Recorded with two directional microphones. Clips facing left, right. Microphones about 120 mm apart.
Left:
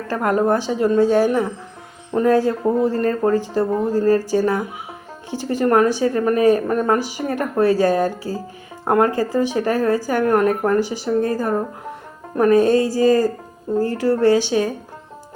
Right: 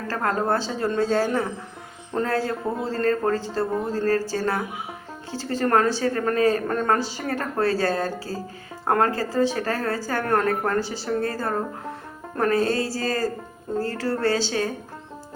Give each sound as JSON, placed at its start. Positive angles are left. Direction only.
{"t": 0.1, "sound": "a woman's voice", "side_deg": 15}